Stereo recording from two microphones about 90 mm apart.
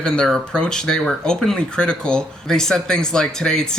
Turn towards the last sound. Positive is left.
turn(degrees=5)  # may be behind; listen again after turning